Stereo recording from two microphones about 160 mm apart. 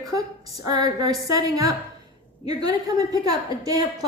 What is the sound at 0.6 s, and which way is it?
A woman's voice, 25° right (ahead or behind).